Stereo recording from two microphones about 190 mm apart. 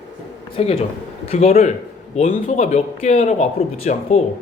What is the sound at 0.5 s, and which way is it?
Speech, 30° left (ahead or behind).